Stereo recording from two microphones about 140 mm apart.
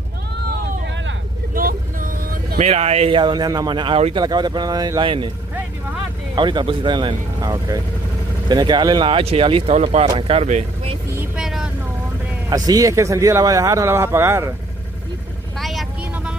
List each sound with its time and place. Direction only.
1.5 s vehicle: 90° right
2.6 s speech: 50° right (ahead or behind)
6.3 s speech: 35° right (ahead or behind)
11.3 s vehicle: 5° right (ahead or behind)
12.4 s speech: 25° right (ahead or behind)
15.6 s vehicle: centre (ahead or behind)